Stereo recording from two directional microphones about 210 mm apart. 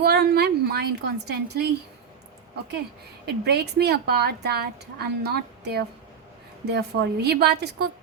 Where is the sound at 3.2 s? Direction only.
50° right (ahead or behind).